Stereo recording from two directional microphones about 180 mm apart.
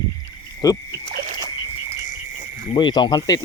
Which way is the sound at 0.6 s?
20° left (ahead or behind).